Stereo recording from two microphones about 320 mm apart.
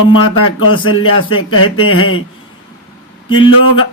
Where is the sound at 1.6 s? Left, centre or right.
Centre.